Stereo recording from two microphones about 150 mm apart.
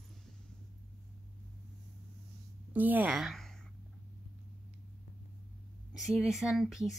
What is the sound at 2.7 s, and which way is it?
Speech, 10° right (ahead or behind).